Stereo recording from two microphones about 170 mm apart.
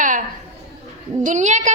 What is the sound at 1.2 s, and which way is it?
Speech, 45° right (ahead or behind).